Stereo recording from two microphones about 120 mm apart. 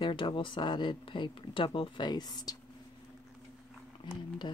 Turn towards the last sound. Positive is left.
turn(degrees=40)  # may be behind; listen again after turning